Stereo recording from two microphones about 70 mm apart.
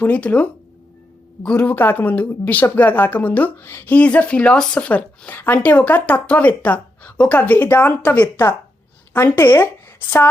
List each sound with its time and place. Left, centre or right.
0.0 s speech: left
1.5 s speech: left